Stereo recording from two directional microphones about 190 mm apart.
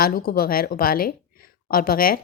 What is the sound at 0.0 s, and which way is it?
Speech, 50° left (ahead or behind).